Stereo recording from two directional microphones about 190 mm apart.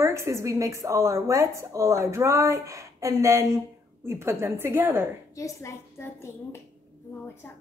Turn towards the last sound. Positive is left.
turn(degrees=15)  # may be behind; listen again after turning